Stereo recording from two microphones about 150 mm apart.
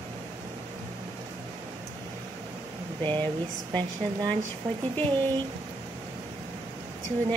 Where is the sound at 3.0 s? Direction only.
30° right (ahead or behind).